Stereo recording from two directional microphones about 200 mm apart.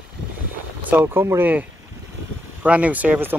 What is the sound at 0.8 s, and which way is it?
Speech, 10° right (ahead or behind).